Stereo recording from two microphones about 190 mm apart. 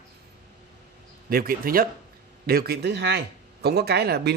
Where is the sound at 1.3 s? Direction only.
50° right (ahead or behind).